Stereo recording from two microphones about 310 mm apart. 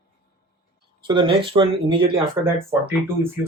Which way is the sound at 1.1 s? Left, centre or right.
Centre.